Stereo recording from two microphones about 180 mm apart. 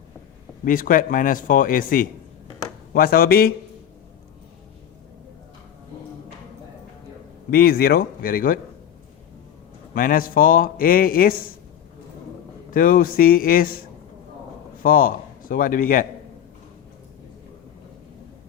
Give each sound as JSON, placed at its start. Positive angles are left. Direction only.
{"t": 0.6, "sound": "a man's voice", "side_deg": 50}
{"t": 7.5, "sound": "speech", "side_deg": 55}
{"t": 9.9, "sound": "a man's voice", "side_deg": 50}
{"t": 12.7, "sound": "a man's voice", "side_deg": 50}
{"t": 14.8, "sound": "a man's voice", "side_deg": 50}